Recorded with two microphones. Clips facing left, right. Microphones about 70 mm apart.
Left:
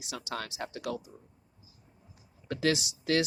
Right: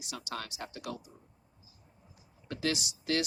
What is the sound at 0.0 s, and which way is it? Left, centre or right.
Speech, left.